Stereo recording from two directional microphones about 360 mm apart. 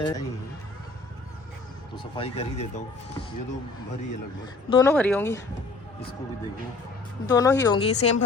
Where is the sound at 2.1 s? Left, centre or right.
Centre.